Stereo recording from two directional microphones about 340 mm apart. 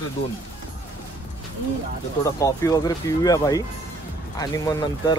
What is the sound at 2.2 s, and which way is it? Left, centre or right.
Speech, centre.